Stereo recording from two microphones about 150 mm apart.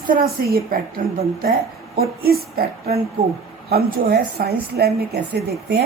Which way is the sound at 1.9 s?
90° right.